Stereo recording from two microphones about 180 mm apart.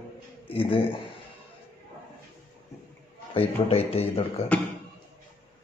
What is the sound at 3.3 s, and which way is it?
Speech, 30° left (ahead or behind).